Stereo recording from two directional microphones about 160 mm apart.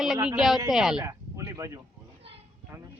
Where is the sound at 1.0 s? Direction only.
20° right (ahead or behind).